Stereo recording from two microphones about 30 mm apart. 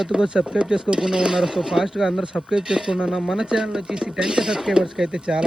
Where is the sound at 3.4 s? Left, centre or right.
Right.